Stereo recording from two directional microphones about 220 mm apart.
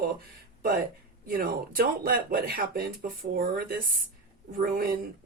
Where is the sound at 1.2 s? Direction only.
40° right (ahead or behind).